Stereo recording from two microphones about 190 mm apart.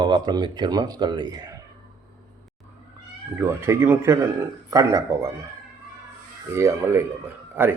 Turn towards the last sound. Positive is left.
turn(degrees=-10)  # may be behind; listen again after turning